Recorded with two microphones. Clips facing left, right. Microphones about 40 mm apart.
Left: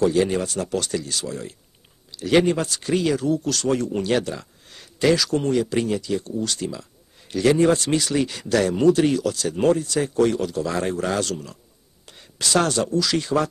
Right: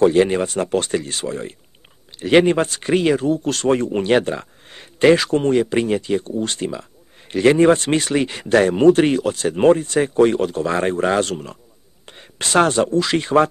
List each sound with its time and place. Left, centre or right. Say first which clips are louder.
0.0 s speech: right 5 dB; right